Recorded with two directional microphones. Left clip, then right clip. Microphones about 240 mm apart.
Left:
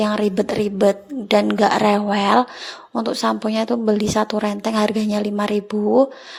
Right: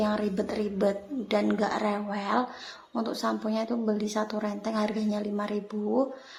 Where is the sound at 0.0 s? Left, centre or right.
Left.